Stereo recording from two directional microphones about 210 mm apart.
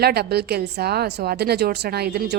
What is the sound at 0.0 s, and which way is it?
A woman's voice, 50° right (ahead or behind).